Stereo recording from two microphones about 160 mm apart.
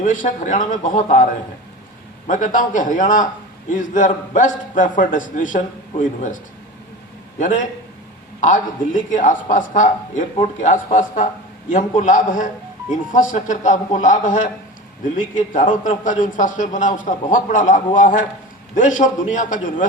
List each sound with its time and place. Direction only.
0.0 s speech: 55° left (ahead or behind)